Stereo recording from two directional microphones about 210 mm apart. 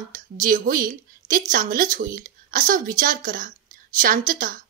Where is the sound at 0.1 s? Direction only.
40° right (ahead or behind).